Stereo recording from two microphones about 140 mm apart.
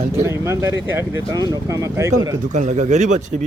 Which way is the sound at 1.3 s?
25° right (ahead or behind).